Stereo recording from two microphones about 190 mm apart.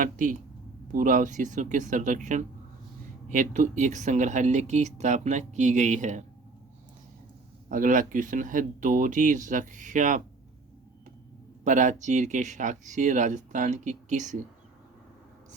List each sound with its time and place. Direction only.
0.0 s speech: 45° right (ahead or behind)
7.7 s speech: 45° right (ahead or behind)
11.6 s speech: 40° right (ahead or behind)